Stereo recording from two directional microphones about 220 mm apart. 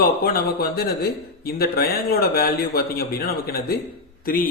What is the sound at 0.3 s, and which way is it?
Speech, 45° left (ahead or behind).